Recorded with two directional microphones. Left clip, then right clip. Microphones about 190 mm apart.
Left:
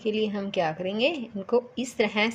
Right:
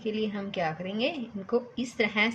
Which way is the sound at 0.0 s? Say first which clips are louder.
Left 4 dB; 35° left (ahead or behind).